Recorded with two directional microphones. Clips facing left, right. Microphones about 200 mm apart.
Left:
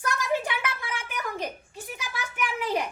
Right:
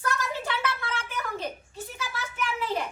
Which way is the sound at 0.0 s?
15° left (ahead or behind).